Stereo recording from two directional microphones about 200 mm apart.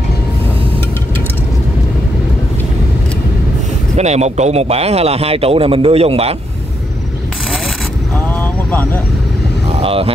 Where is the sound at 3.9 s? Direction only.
35° right (ahead or behind).